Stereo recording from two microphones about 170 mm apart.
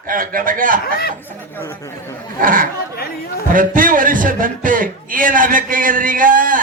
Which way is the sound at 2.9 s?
65° left (ahead or behind).